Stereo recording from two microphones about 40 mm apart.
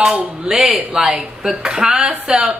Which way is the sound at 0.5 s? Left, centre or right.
Centre.